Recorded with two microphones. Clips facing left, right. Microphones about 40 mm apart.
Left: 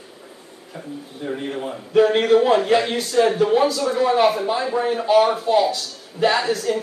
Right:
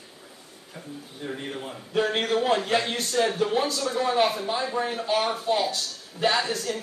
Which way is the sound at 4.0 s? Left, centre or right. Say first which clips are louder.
Left 6 dB; left.